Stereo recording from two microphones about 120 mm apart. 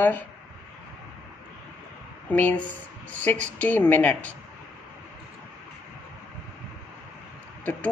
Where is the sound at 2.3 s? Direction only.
15° left (ahead or behind).